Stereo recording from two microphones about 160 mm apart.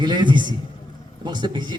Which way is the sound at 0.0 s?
30° right (ahead or behind).